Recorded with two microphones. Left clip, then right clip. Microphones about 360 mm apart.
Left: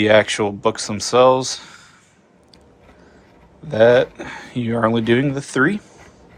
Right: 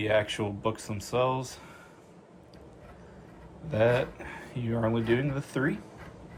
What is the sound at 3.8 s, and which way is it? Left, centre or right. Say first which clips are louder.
Speech: left 14 dB; left.